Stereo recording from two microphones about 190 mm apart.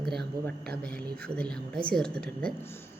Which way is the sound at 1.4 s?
5° left (ahead or behind).